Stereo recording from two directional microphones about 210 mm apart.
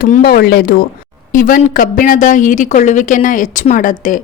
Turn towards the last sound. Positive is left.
turn(degrees=40)  # may be behind; listen again after turning